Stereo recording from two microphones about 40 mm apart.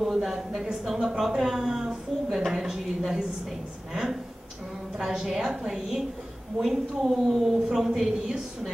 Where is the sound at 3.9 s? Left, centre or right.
Centre.